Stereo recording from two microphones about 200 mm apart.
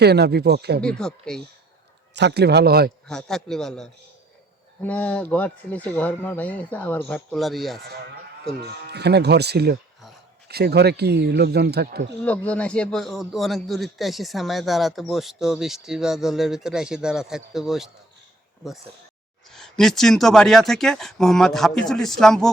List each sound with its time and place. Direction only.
0.0 s speech: 55° right (ahead or behind)
0.8 s a man's voice: 5° left (ahead or behind)
2.1 s speech: 55° right (ahead or behind)
3.1 s a man's voice: 5° left (ahead or behind)
7.8 s speech: 50° right (ahead or behind)
12.2 s a man's voice: 5° left (ahead or behind)
19.5 s a man's voice: centre (ahead or behind)